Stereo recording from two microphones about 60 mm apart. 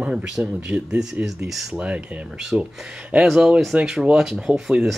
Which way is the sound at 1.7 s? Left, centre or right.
Centre.